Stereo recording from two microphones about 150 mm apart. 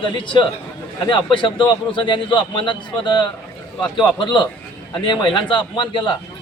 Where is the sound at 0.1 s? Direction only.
30° left (ahead or behind).